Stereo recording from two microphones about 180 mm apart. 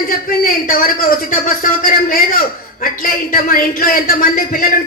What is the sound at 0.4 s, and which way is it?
A man's voice, 50° left (ahead or behind).